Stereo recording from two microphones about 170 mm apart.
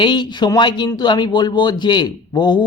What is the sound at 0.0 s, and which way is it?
Speech, 25° left (ahead or behind).